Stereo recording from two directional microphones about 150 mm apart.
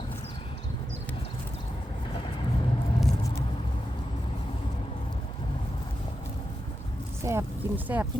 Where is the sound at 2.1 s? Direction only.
35° left (ahead or behind).